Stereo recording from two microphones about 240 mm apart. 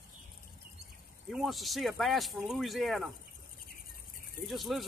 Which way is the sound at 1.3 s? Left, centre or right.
Centre.